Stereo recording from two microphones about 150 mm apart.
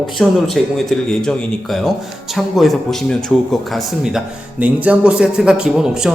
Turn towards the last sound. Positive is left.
turn(degrees=-5)  # may be behind; listen again after turning